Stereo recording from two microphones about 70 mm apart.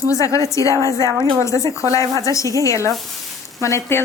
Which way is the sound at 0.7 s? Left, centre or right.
Right.